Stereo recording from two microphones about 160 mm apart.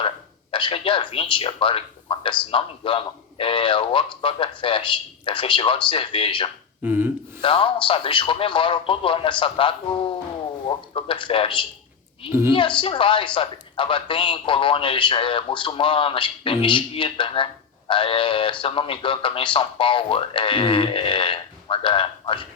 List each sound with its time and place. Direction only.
0.5 s speech: 30° left (ahead or behind)
6.8 s speech: 10° right (ahead or behind)
7.4 s speech: 30° left (ahead or behind)